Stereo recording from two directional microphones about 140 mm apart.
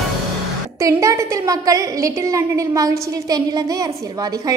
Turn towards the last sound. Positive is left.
turn(degrees=-25)  # may be behind; listen again after turning